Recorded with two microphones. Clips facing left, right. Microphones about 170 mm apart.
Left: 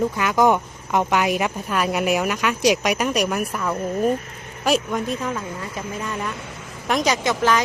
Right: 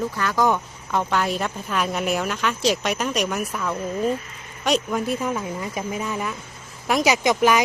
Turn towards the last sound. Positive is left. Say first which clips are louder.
# right 2 dB
turn(degrees=-15)  # may be behind; listen again after turning